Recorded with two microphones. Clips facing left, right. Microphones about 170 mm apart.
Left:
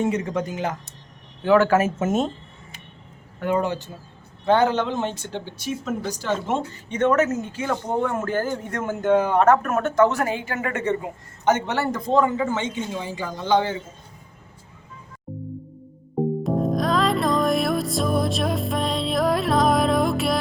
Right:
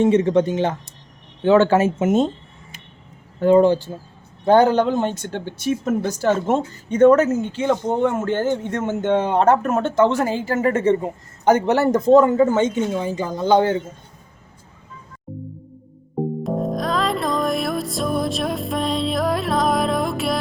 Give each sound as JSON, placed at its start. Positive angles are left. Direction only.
{"t": 0.0, "sound": "speech", "side_deg": -30}
{"t": 3.4, "sound": "speech", "side_deg": -30}
{"t": 4.4, "sound": "speech", "side_deg": -40}
{"t": 5.3, "sound": "speech", "side_deg": -55}
{"t": 15.3, "sound": "music", "side_deg": 0}